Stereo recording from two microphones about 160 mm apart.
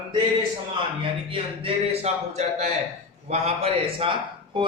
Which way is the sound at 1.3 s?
35° right (ahead or behind).